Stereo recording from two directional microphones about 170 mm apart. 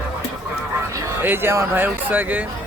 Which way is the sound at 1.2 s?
10° right (ahead or behind).